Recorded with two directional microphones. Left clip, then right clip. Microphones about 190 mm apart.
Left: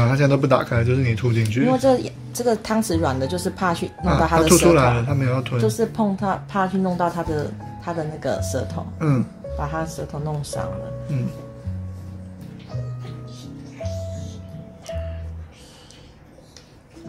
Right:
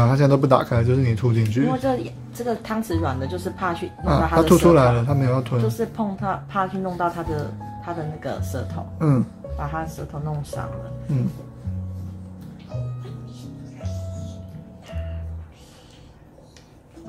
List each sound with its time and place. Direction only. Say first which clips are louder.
0.0 s speech: right 1 dB; 20° right (ahead or behind)
1.7 s a woman's voice: left 6 dB; 40° left (ahead or behind)
4.4 s speech: right 1 dB; 20° right (ahead or behind)
5.8 s a woman's voice: left 4 dB; 40° left (ahead or behind)
8.9 s speech: right 1 dB; 20° right (ahead or behind)
9.6 s a woman's voice: left 2 dB; 35° left (ahead or behind)